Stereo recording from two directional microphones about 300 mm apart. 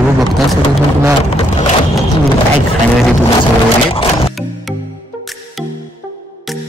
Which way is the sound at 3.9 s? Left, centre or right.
Centre.